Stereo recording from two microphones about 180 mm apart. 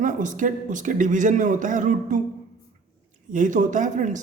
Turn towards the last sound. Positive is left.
turn(degrees=-45)  # may be behind; listen again after turning